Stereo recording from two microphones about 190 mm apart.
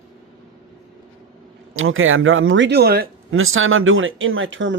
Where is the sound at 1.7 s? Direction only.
90° right; by 3.1 s 55° right (ahead or behind).